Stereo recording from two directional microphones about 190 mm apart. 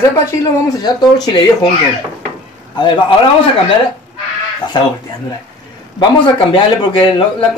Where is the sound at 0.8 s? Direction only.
25° left (ahead or behind).